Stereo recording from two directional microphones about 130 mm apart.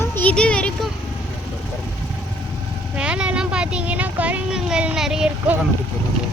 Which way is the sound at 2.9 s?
5° right (ahead or behind).